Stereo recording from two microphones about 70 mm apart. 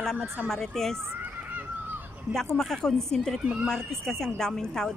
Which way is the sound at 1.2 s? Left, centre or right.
Right.